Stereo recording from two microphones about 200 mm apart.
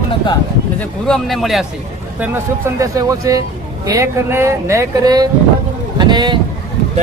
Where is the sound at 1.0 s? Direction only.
Centre (ahead or behind).